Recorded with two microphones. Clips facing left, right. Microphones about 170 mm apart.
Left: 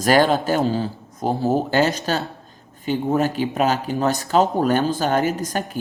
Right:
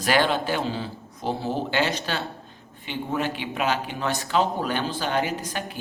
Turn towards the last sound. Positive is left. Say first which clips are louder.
# left 7 dB
turn(degrees=45)  # may be behind; listen again after turning